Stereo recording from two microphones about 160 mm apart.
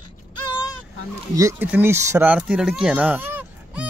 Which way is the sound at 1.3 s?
20° right (ahead or behind).